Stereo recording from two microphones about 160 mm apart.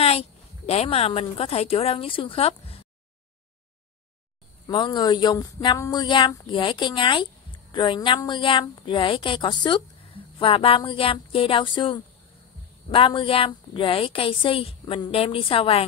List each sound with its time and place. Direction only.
0.0 s speech: 40° left (ahead or behind)
4.6 s a woman's voice: 30° left (ahead or behind)